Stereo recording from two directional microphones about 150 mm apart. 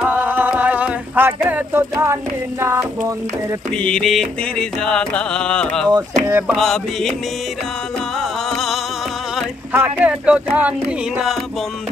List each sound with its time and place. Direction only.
0.0 s a sound: 10° right (ahead or behind)
2.6 s speech: 15° right (ahead or behind)
3.7 s music: 5° left (ahead or behind)
6.2 s speech: 10° right (ahead or behind)
6.6 s music: centre (ahead or behind)
8.2 s music: centre (ahead or behind)
9.7 s speech: 10° right (ahead or behind)